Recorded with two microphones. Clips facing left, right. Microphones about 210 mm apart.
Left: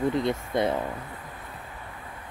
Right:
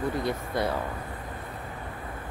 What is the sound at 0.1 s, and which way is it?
Speech, 20° left (ahead or behind).